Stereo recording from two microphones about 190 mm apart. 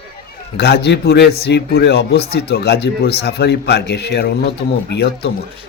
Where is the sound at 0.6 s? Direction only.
60° left (ahead or behind).